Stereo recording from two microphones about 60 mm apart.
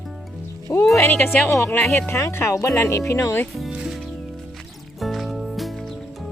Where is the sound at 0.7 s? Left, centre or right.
Left.